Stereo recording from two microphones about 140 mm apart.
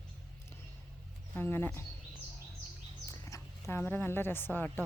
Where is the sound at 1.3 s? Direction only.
15° left (ahead or behind).